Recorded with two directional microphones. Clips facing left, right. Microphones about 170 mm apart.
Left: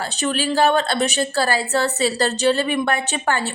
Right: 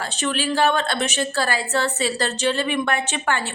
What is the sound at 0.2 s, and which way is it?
A woman's voice, 35° left (ahead or behind).